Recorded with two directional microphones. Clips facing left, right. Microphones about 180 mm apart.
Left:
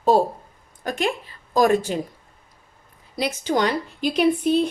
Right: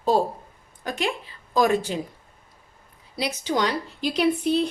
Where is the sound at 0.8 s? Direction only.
50° left (ahead or behind).